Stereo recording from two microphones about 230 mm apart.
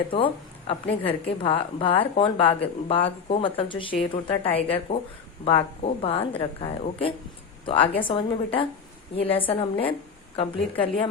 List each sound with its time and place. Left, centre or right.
0.7 s a woman's voice: left